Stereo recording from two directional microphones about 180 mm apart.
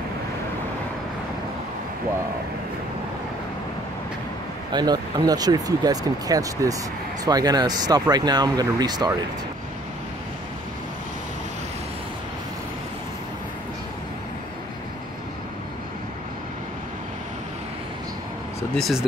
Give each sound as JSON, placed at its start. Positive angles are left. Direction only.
{"t": 4.7, "sound": "speech", "side_deg": -20}
{"t": 18.8, "sound": "speech", "side_deg": 0}